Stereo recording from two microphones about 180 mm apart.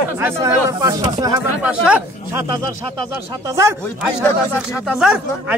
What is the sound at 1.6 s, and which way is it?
Speech, 5° right (ahead or behind).